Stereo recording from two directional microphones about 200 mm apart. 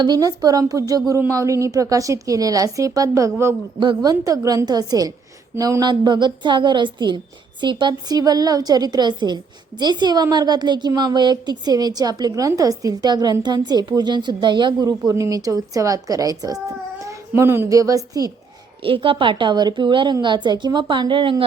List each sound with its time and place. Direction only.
0.0 s a woman's voice: 20° right (ahead or behind)